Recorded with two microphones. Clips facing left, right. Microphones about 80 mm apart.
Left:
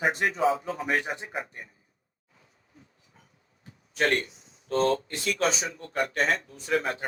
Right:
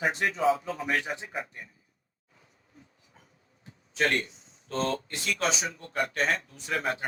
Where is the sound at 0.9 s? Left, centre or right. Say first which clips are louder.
Left 2 dB; left.